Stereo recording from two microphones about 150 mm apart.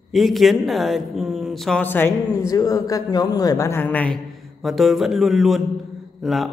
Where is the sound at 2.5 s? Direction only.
25° left (ahead or behind).